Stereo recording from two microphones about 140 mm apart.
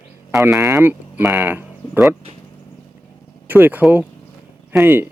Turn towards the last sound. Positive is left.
turn(degrees=-15)  # may be behind; listen again after turning